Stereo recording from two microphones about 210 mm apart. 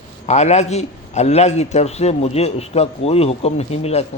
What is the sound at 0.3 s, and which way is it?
A man's voice, 30° left (ahead or behind).